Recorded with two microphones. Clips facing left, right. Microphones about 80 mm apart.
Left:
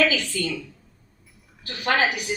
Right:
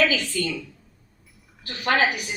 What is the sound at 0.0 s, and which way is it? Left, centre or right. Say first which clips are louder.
Speech: even; right.